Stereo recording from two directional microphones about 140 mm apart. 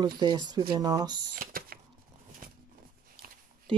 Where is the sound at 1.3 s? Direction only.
90° right.